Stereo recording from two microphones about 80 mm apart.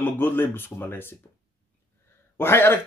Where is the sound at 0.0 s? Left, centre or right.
Left.